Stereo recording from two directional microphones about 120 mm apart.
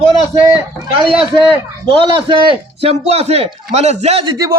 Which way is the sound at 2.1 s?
45° right (ahead or behind).